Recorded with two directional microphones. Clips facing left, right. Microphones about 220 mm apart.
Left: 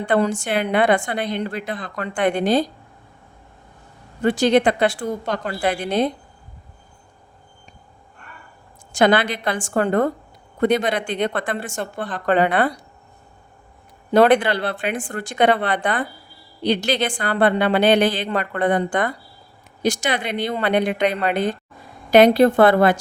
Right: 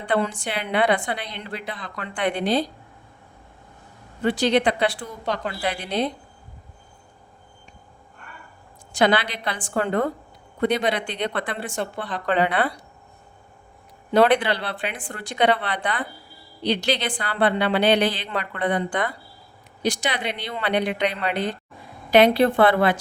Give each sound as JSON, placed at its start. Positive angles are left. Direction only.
{"t": 0.0, "sound": "a woman's voice", "side_deg": 45}
{"t": 4.2, "sound": "a woman's voice", "side_deg": 45}
{"t": 8.9, "sound": "a woman's voice", "side_deg": 45}
{"t": 14.1, "sound": "a woman's voice", "side_deg": 45}